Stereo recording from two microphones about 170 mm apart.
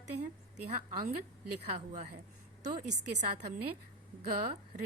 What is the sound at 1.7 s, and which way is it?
Speech, 40° right (ahead or behind).